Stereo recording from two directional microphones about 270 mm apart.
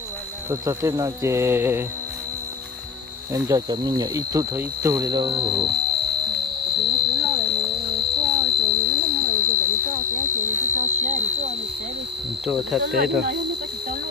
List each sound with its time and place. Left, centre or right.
0.5 s speech: centre
3.3 s speech: centre
6.6 s a sound: right
7.2 s horse: right
7.7 s music: right
8.2 s a sound: centre
8.5 s a sound: right
10.7 s sine wave: right
12.8 s speech: right